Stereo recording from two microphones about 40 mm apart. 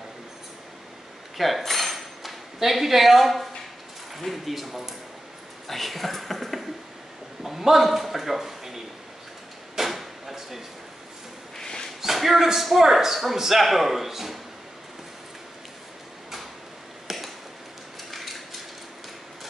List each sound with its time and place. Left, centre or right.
1.3 s dishes: centre
4.2 s a man's voice: centre
9.8 s drawer open or close: centre
11.5 s a sound: centre
12.0 s a man's voice: centre
17.1 s chop: centre
18.1 s a sound: centre